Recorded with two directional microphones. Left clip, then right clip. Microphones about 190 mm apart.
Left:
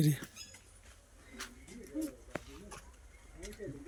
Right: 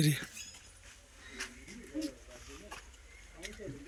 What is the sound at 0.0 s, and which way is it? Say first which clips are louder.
Speech: right 2 dB; 15° left (ahead or behind).